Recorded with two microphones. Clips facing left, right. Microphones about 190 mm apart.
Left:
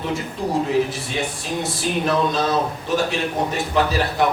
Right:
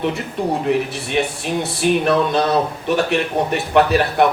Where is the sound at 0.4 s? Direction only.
65° right (ahead or behind).